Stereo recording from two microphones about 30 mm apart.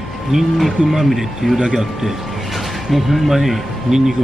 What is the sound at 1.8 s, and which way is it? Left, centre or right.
Speech, centre.